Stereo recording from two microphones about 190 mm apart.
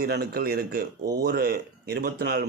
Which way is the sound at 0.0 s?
55° right (ahead or behind).